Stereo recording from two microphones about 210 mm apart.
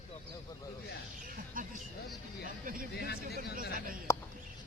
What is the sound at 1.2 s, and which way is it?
Music, 40° right (ahead or behind).